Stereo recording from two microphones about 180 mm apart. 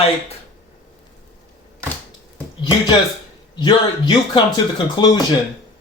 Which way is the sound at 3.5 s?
25° left (ahead or behind).